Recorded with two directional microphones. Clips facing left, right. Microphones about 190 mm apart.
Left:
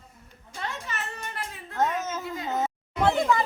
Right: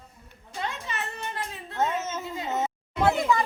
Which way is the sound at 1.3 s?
25° right (ahead or behind).